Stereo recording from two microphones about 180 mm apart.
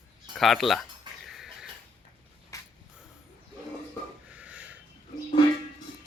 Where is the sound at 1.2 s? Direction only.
Centre (ahead or behind).